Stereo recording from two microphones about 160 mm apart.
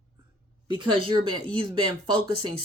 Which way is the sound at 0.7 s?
30° right (ahead or behind).